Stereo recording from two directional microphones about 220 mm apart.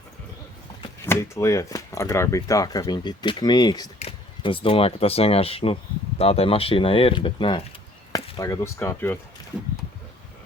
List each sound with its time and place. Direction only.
1.0 s speech: 10° left (ahead or behind)